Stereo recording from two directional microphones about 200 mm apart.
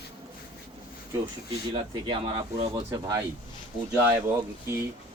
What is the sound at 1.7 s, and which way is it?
Speech, 25° right (ahead or behind).